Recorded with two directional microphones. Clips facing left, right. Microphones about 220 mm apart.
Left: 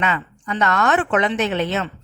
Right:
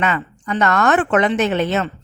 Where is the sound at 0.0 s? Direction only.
50° right (ahead or behind).